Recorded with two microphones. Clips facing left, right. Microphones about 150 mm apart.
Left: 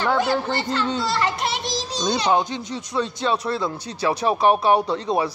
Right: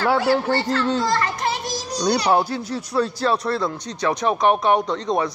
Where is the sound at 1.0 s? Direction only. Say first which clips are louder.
Right 1 dB; 90° left.